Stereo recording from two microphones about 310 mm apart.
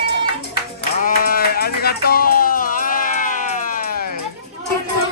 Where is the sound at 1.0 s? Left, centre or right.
Left.